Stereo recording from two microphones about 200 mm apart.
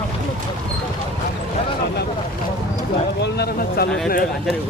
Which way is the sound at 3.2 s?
50° left (ahead or behind).